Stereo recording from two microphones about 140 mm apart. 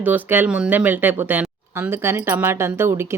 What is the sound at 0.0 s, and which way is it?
Speech, 10° right (ahead or behind).